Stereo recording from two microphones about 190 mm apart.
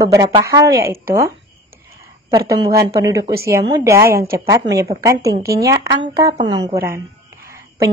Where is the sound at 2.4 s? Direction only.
15° right (ahead or behind).